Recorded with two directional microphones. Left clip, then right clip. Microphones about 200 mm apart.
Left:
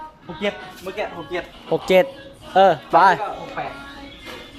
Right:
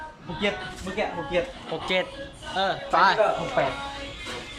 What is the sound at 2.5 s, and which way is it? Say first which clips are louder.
Speech: left 9 dB; 35° left (ahead or behind).